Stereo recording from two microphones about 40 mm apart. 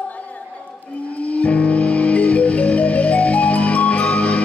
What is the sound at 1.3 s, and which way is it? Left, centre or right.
Music, left.